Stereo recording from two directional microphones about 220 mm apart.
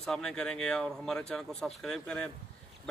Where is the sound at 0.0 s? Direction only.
5° left (ahead or behind).